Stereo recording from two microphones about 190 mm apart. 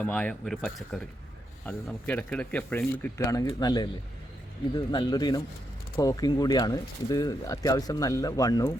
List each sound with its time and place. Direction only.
0.0 s speech: 5° left (ahead or behind)